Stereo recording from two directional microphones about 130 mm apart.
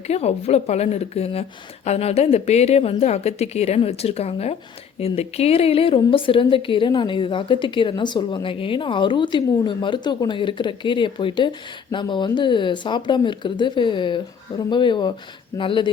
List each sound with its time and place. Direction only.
0.1 s a woman's voice: 55° left (ahead or behind); by 15.9 s 40° left (ahead or behind)